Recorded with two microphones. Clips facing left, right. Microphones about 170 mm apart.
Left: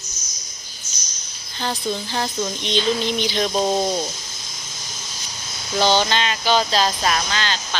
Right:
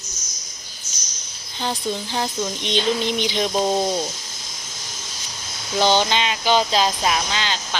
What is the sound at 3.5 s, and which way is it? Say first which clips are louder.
Speech: even; centre (ahead or behind).